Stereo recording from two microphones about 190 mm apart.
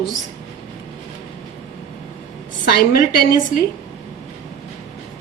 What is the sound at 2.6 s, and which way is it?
Speech, 50° left (ahead or behind).